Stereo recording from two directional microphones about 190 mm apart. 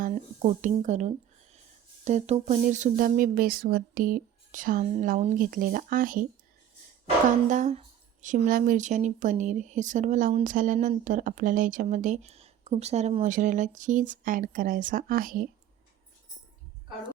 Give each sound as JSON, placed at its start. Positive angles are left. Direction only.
{"t": 0.0, "sound": "speech", "side_deg": -35}
{"t": 7.4, "sound": "speech", "side_deg": -40}